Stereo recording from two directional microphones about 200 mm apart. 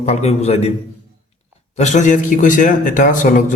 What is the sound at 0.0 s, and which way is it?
Speech, 30° left (ahead or behind).